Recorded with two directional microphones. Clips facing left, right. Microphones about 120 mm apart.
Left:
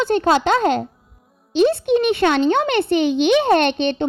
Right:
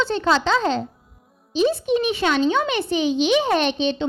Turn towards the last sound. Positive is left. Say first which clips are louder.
# left 4 dB
turn(degrees=60)  # may be behind; listen again after turning